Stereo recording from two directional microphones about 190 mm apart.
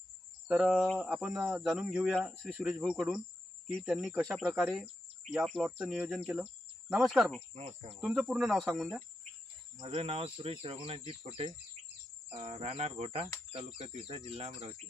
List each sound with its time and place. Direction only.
0.4 s speech: 5° right (ahead or behind)
7.5 s speech: 30° right (ahead or behind)
8.0 s speech: centre (ahead or behind)
9.8 s speech: 30° right (ahead or behind)